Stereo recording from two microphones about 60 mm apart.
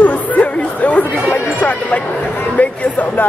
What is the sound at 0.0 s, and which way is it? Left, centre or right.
Chatter, left.